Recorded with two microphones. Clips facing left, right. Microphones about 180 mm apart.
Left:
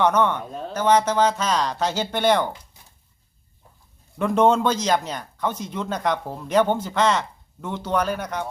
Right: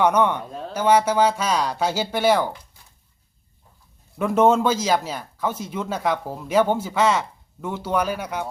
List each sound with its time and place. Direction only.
0.0 s speech: 10° right (ahead or behind)
0.4 s speech: centre (ahead or behind)
2.8 s a sound: 20° left (ahead or behind)
4.2 s speech: 5° right (ahead or behind)